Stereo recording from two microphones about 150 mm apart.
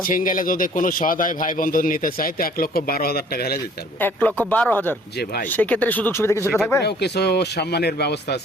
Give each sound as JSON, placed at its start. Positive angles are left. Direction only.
{"t": 0.1, "sound": "a man's voice", "side_deg": 65}
{"t": 4.0, "sound": "speech", "side_deg": 10}
{"t": 5.1, "sound": "speech", "side_deg": 90}
{"t": 5.5, "sound": "speech", "side_deg": 10}
{"t": 6.8, "sound": "speech", "side_deg": 90}